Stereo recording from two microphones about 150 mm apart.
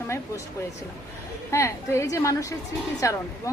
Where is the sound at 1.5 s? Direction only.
20° left (ahead or behind).